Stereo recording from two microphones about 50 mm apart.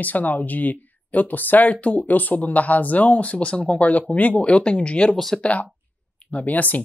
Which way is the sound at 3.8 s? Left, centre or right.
Left.